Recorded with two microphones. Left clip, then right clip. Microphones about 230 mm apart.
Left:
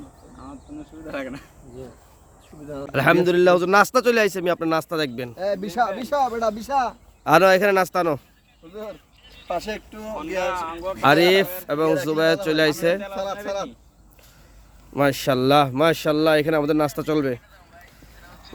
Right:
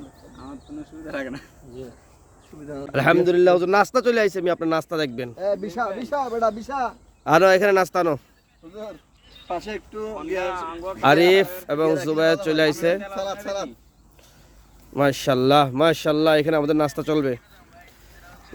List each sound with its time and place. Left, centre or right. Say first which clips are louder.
1.0 s speech: even; centre
2.6 s speech: even; centre
5.4 s speech: left 2 dB; left
7.3 s speech: even; centre
8.7 s speech: left 1 dB; left
9.5 s speech: left 2 dB; left
10.4 s speech: left 2 dB; left
11.0 s speech: right 1 dB; centre
14.9 s speech: even; centre